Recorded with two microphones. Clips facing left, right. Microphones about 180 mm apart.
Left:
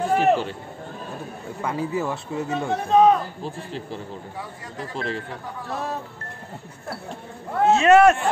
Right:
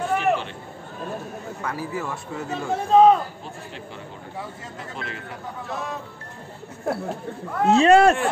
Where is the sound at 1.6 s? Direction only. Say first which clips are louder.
Left 5 dB; 25° left (ahead or behind).